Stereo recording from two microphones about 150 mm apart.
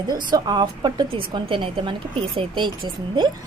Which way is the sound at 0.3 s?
30° right (ahead or behind).